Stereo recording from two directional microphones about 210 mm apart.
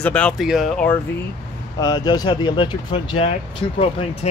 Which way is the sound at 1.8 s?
20° left (ahead or behind).